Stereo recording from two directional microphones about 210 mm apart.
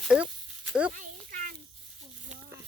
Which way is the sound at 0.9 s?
40° right (ahead or behind).